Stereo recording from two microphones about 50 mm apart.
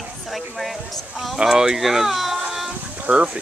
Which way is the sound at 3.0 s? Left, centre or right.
Right.